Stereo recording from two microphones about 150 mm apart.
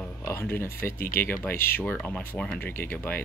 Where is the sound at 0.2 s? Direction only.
15° left (ahead or behind).